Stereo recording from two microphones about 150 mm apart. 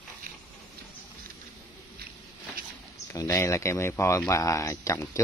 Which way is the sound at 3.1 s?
20° left (ahead or behind).